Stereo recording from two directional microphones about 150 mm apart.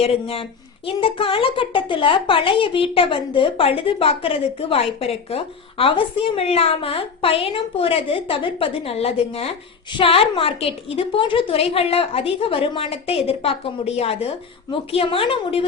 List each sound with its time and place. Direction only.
0.0 s a woman's voice: 40° left (ahead or behind)